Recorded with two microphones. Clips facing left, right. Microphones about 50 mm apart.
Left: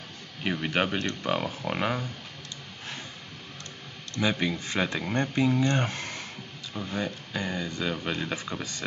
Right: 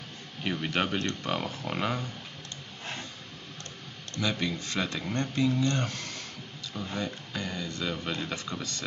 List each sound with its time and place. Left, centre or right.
0.4 s speech: centre
4.2 s speech: left
6.7 s speech: centre